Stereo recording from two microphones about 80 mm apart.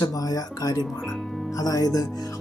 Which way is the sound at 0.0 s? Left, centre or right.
Left.